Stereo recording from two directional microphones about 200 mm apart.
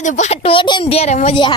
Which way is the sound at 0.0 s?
35° left (ahead or behind).